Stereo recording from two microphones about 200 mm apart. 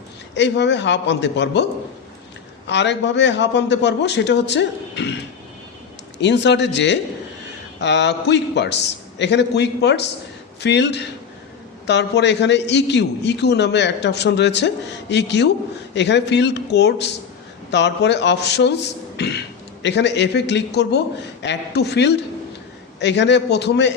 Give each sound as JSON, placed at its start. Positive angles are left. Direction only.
{"t": 0.3, "sound": "a man's voice", "side_deg": 60}
{"t": 2.6, "sound": "a man's voice", "side_deg": 60}
{"t": 6.1, "sound": "a man's voice", "side_deg": 60}